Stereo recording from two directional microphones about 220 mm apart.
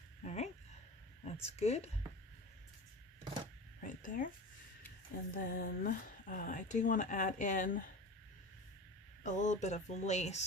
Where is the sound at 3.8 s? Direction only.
35° left (ahead or behind).